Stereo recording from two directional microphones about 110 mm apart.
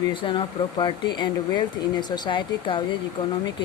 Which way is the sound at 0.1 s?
45° left (ahead or behind).